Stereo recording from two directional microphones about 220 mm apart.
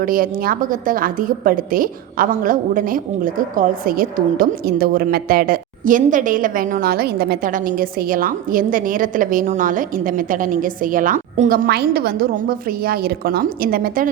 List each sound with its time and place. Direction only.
0.0 s a woman's voice: 40° right (ahead or behind)